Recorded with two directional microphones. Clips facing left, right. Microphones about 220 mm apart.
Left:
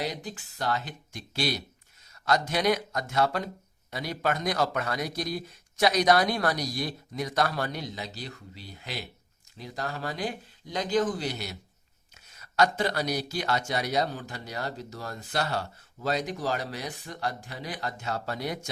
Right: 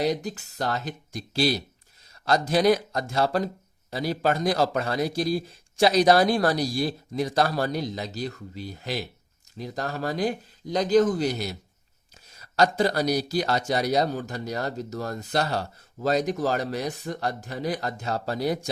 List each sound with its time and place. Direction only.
0.0 s a man's voice: 40° right (ahead or behind)